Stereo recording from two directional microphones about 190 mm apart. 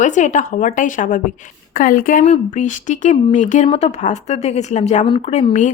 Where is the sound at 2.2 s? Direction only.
35° left (ahead or behind).